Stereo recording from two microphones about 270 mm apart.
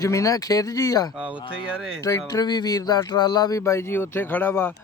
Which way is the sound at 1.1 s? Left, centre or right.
Centre.